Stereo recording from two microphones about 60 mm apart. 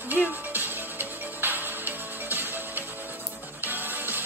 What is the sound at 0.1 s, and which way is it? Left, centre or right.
Music, right.